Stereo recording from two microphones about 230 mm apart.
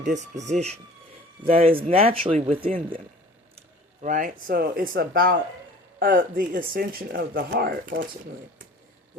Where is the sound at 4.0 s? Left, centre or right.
Right.